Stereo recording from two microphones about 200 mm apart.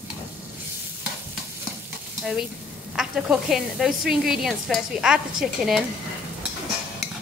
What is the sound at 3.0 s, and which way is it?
Speech, 5° right (ahead or behind).